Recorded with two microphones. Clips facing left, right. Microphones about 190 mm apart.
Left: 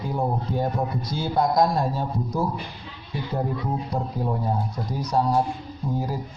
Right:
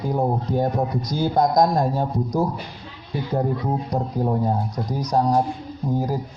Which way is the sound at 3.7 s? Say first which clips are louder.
Right 3 dB; 40° right (ahead or behind).